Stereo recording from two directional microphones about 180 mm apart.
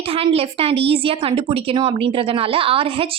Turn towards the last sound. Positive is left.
turn(degrees=-30)  # may be behind; listen again after turning